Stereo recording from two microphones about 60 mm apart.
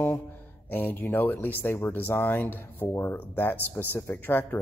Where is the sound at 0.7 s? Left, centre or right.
Left.